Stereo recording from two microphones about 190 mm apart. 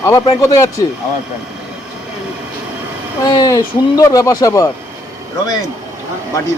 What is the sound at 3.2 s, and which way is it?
Speech, 20° left (ahead or behind).